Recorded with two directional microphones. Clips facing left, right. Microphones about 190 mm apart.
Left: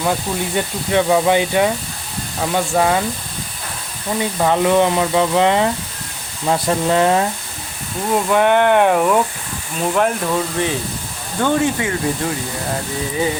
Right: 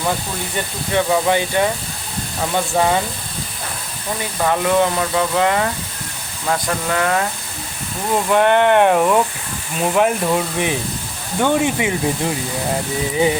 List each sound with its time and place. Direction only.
0.5 s speech: 15° left (ahead or behind)
2.4 s speech: centre (ahead or behind)
4.4 s frying: 20° left (ahead or behind)
8.1 s speech: centre (ahead or behind); by 12.3 s 15° right (ahead or behind)